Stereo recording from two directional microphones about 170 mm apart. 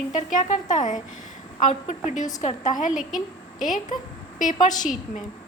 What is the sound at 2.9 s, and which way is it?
Speech, centre (ahead or behind).